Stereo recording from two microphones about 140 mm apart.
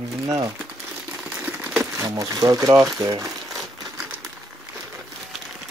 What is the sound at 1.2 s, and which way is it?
Typewriter, 10° right (ahead or behind).